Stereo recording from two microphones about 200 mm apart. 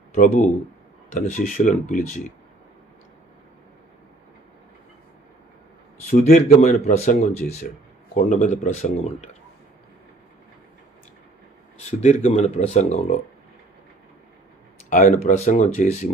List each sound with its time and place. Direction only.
0.1 s speech: 40° left (ahead or behind)
6.0 s speech: 45° left (ahead or behind)
11.8 s speech: 35° left (ahead or behind)
14.9 s speech: 40° left (ahead or behind)